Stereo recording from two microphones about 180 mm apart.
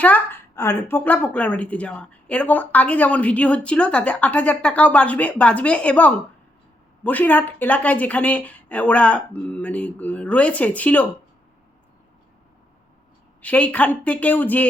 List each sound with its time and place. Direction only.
0.0 s a woman's voice: 10° left (ahead or behind)
13.4 s a woman's voice: 10° left (ahead or behind)